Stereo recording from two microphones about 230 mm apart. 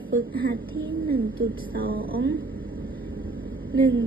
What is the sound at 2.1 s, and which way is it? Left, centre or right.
Music, right.